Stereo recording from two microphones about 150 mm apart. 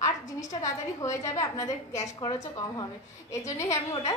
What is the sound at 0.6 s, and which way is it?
A woman's voice, 20° left (ahead or behind).